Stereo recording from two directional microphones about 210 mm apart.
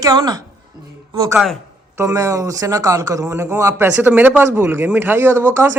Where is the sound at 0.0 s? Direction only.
20° right (ahead or behind).